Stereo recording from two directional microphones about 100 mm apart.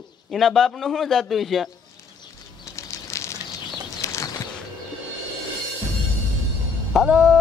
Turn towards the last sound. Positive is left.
turn(degrees=-5)  # may be behind; listen again after turning